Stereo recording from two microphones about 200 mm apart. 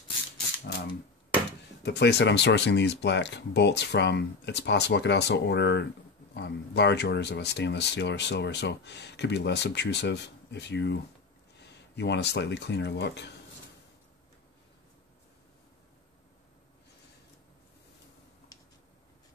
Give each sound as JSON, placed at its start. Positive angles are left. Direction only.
{"t": 1.8, "sound": "speech", "side_deg": 60}